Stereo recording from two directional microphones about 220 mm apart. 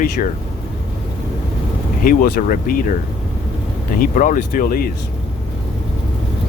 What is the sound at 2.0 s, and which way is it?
Speech, 40° left (ahead or behind).